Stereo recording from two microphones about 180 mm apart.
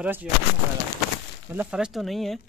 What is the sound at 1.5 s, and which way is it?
Speech, 5° right (ahead or behind).